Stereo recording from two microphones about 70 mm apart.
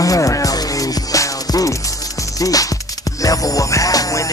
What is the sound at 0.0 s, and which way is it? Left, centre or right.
Music, left.